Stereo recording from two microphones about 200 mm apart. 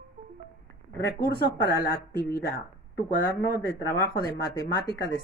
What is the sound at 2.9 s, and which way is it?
Speech, 60° left (ahead or behind).